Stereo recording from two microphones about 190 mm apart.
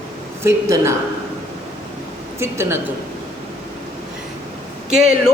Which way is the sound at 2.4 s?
15° right (ahead or behind).